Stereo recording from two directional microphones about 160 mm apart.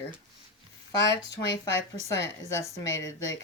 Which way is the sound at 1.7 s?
15° left (ahead or behind).